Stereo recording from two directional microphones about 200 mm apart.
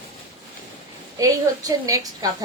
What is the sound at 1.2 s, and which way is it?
Speech, 15° right (ahead or behind).